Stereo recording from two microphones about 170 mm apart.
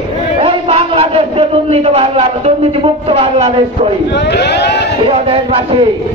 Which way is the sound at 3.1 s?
35° right (ahead or behind).